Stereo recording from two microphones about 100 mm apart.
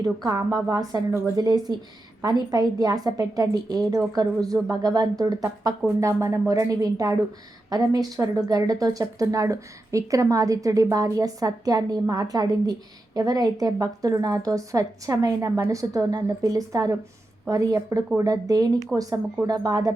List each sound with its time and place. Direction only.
0.3 s speech: 30° right (ahead or behind)